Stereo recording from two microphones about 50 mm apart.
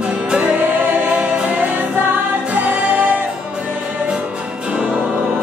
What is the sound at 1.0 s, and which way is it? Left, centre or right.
Music, right.